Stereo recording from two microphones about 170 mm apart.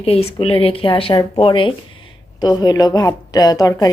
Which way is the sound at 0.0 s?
35° left (ahead or behind).